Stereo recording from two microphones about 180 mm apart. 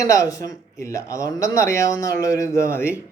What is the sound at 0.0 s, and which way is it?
A man's voice, 15° left (ahead or behind).